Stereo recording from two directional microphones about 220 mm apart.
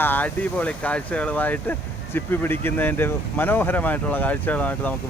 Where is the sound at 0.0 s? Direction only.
10° left (ahead or behind).